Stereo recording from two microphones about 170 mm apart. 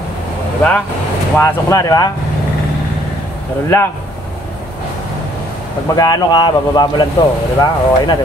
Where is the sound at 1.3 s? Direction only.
15° left (ahead or behind).